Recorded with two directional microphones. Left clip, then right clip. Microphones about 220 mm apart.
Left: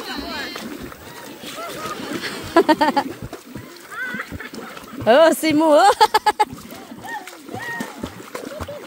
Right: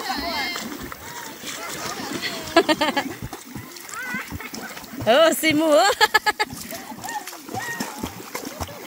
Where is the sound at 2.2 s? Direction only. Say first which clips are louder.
Left 3 dB; 25° left (ahead or behind).